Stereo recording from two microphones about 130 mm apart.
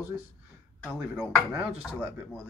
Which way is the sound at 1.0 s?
5° right (ahead or behind).